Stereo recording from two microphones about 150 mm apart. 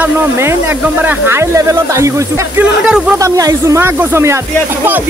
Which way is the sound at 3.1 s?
20° right (ahead or behind).